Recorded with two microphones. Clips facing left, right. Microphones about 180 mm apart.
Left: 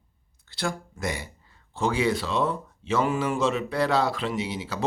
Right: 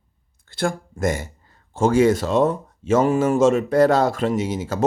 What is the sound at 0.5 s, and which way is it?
Speech, 50° right (ahead or behind).